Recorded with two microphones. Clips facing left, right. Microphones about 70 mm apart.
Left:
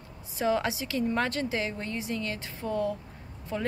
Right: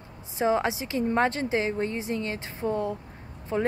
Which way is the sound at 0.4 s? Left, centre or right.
Right.